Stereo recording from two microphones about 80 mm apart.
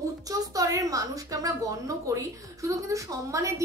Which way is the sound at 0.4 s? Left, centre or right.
Right.